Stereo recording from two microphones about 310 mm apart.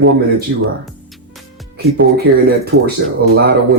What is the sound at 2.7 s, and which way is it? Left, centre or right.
Speech, right.